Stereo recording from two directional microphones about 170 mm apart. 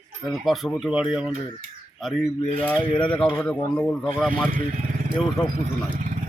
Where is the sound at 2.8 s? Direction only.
30° left (ahead or behind).